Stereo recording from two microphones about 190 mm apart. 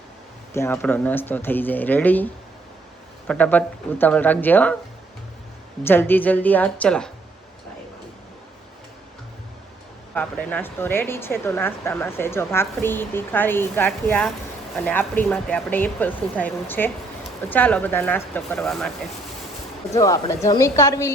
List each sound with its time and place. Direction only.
0.5 s speech: 15° left (ahead or behind)
5.8 s speech: 10° left (ahead or behind)
10.2 s speech: 10° left (ahead or behind)
19.9 s speech: 15° left (ahead or behind)